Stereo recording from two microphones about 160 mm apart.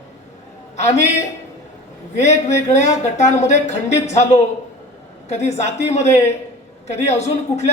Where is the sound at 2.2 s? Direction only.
45° left (ahead or behind).